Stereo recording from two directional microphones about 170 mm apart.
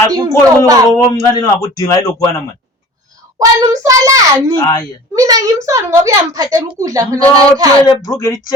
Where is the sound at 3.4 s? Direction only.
20° right (ahead or behind).